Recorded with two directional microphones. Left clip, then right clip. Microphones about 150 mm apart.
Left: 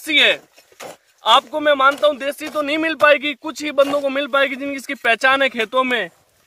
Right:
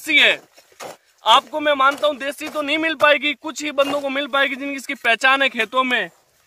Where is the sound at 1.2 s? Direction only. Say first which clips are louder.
Even; 50° left (ahead or behind).